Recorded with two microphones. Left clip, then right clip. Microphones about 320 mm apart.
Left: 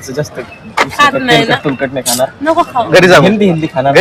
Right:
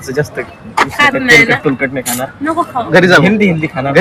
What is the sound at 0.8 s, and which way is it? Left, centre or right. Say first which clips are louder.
Speech: left 1 dB; centre.